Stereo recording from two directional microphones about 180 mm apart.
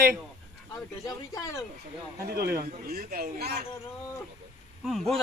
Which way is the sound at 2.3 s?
60° right (ahead or behind).